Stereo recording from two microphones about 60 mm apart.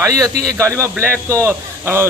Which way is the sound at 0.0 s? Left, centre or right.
Right.